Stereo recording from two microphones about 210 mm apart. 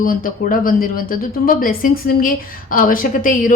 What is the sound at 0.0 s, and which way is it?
A woman's voice, 40° left (ahead or behind).